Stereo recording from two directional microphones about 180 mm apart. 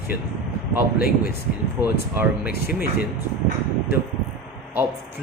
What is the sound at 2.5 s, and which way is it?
Speech, 60° left (ahead or behind).